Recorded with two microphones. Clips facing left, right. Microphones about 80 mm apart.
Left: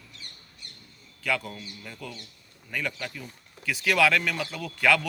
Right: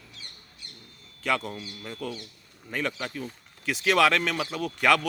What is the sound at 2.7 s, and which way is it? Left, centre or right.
Speech, right.